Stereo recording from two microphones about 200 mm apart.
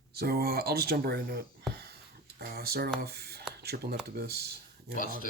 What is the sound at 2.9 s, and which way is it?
Speech, 55° right (ahead or behind).